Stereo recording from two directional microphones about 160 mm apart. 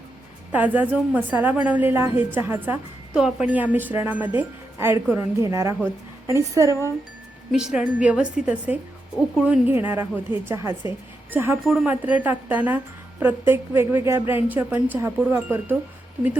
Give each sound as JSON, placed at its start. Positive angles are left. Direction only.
{"t": 0.5, "sound": "speech", "side_deg": -10}
{"t": 3.2, "sound": "speech", "side_deg": -5}
{"t": 6.7, "sound": "speech", "side_deg": 15}
{"t": 7.5, "sound": "speech", "side_deg": -5}